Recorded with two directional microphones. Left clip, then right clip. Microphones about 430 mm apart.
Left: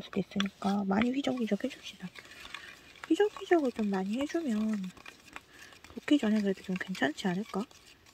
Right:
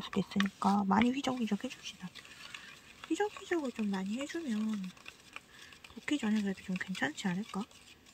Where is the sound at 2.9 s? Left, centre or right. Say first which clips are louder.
Left 6 dB; centre.